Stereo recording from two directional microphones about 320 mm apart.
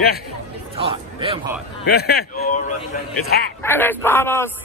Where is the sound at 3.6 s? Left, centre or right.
Centre.